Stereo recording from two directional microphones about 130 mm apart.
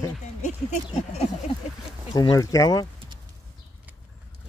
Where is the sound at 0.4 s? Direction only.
60° left (ahead or behind).